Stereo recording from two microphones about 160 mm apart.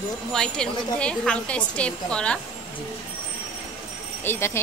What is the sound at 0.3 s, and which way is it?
A woman's voice, 5° left (ahead or behind).